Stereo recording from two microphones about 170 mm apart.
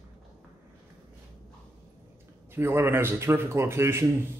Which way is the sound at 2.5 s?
15° right (ahead or behind).